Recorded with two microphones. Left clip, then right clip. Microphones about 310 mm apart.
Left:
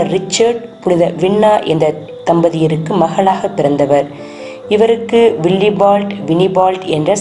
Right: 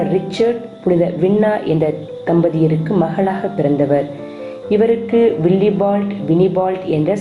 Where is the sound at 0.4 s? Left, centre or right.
Left.